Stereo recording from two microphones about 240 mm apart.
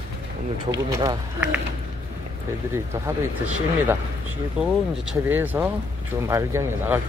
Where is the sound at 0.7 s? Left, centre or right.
Centre.